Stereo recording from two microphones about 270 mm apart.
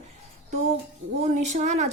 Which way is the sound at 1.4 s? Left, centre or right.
Right.